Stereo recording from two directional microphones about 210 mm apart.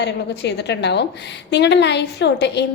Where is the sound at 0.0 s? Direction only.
55° left (ahead or behind).